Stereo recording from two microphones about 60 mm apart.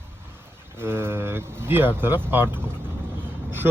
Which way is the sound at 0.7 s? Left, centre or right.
Right.